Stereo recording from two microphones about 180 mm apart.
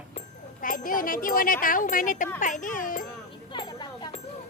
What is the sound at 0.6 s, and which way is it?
Speech, 50° left (ahead or behind).